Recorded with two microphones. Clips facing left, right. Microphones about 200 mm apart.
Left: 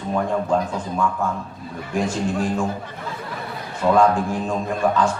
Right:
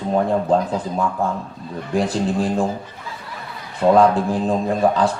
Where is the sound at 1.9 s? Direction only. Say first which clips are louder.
Right 3 dB; 35° right (ahead or behind).